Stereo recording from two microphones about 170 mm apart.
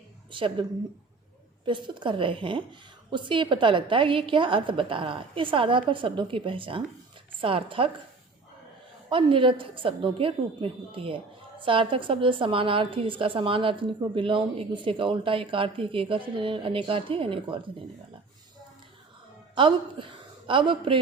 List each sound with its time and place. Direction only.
0.3 s a woman's voice: 30° right (ahead or behind)
1.6 s a woman's voice: 30° right (ahead or behind)
9.0 s a woman's voice: 30° right (ahead or behind)
19.5 s a woman's voice: 30° right (ahead or behind)